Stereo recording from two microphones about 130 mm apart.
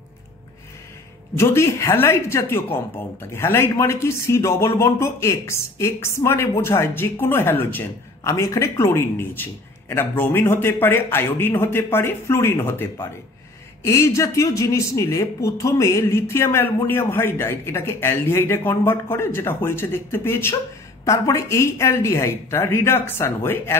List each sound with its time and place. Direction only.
1.3 s speech: 20° left (ahead or behind)
13.8 s speech: 25° left (ahead or behind)